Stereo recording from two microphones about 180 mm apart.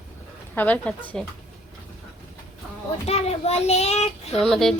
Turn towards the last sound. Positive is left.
turn(degrees=0)  # may be behind; listen again after turning